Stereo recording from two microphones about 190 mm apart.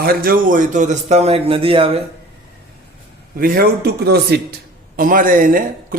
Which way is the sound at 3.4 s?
50° right (ahead or behind).